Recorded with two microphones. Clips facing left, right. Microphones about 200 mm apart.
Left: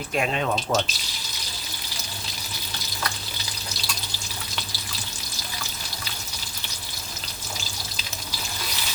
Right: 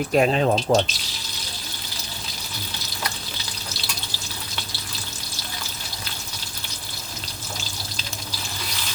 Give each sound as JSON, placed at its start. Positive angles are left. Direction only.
{"t": 0.1, "sound": "speech", "side_deg": -35}